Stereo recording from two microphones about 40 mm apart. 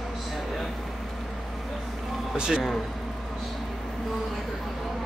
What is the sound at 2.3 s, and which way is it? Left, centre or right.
Speech, centre.